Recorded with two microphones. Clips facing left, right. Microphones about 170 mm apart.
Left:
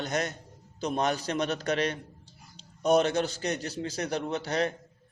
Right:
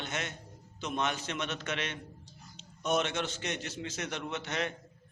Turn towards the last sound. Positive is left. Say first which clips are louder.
# left 6 dB
turn(degrees=35)  # may be behind; listen again after turning